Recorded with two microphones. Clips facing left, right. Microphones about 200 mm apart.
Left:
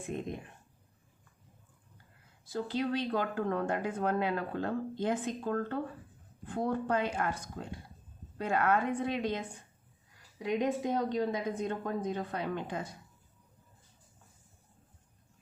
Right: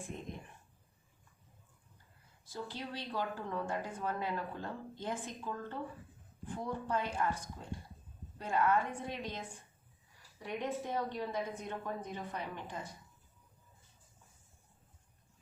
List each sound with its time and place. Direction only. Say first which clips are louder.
2.5 s speech: left 10 dB; 65° left (ahead or behind)
10.3 s a woman's voice: left 7 dB; 90° left; by 12.9 s 70° left (ahead or behind)